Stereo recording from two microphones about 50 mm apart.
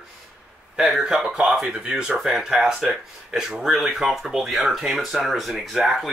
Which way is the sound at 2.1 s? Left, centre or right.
Centre.